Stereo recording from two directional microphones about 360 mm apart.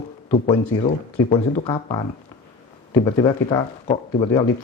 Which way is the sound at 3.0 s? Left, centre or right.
Centre.